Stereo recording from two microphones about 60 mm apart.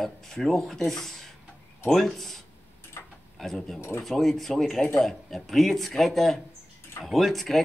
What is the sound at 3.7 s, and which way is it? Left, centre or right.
Speech, left.